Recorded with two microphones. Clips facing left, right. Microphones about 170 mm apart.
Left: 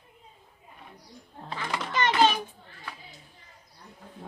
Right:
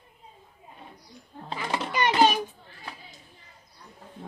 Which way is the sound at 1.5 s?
15° right (ahead or behind).